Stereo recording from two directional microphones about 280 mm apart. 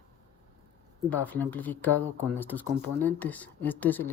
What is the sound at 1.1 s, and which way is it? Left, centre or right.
Speech, centre.